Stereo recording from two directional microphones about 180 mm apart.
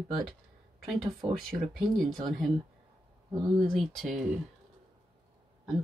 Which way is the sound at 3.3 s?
20° right (ahead or behind).